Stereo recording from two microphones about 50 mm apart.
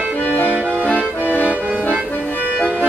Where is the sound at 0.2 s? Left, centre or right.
Left.